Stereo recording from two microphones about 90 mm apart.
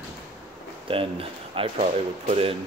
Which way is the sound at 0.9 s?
85° right.